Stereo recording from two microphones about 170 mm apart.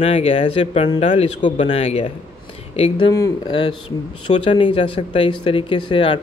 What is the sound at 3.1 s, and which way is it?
Speech, 15° left (ahead or behind).